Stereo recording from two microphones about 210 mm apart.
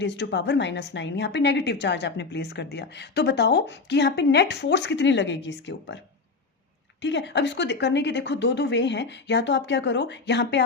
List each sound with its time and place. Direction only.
0.0 s a woman's voice: 55° left (ahead or behind)
7.0 s a woman's voice: 55° left (ahead or behind)